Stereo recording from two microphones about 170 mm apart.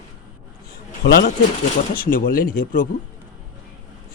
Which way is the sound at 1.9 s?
60° left (ahead or behind).